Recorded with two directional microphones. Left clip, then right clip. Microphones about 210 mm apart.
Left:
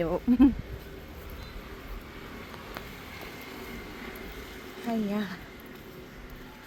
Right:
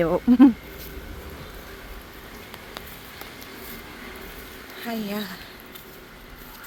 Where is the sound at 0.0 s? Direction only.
15° right (ahead or behind).